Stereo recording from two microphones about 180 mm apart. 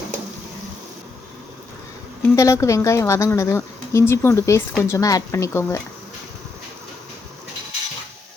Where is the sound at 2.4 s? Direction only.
15° left (ahead or behind).